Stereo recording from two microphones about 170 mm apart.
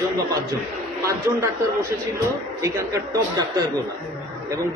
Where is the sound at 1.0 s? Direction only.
15° right (ahead or behind).